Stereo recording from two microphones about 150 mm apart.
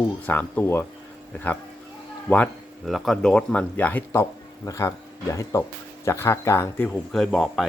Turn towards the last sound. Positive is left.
turn(degrees=0)  # may be behind; listen again after turning